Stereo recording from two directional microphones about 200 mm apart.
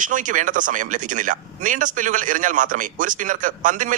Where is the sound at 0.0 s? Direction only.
40° right (ahead or behind).